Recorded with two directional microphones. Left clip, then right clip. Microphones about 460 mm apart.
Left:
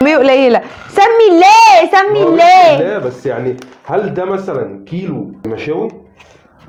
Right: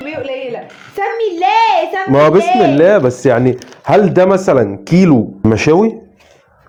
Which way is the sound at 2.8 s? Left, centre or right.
Right.